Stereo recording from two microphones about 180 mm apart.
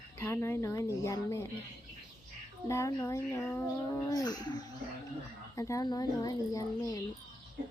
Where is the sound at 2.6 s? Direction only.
15° left (ahead or behind).